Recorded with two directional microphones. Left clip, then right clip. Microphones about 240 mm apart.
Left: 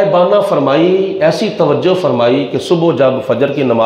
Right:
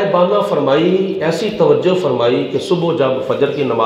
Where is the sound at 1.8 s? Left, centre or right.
Left.